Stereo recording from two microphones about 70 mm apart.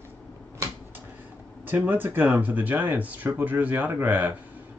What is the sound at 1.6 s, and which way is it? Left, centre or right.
Speech, right.